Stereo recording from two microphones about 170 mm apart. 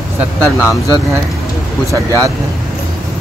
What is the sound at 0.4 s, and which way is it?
Speech, 15° left (ahead or behind).